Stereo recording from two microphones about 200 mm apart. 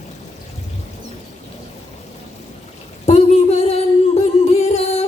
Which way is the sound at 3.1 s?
30° left (ahead or behind).